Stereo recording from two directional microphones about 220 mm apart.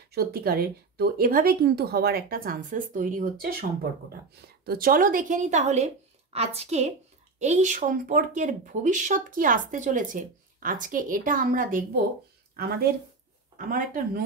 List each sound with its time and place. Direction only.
0.1 s a woman's voice: 45° right (ahead or behind)